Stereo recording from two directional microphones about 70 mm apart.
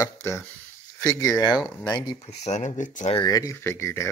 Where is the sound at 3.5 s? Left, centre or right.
Left.